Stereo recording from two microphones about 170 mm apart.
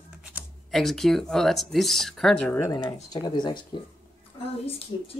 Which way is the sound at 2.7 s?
25° left (ahead or behind).